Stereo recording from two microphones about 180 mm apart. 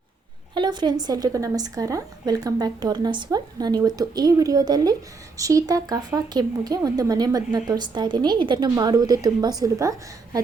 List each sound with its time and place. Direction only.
0.5 s speech: 25° right (ahead or behind)